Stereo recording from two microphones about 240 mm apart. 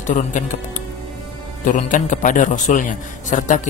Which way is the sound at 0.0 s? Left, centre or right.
Left.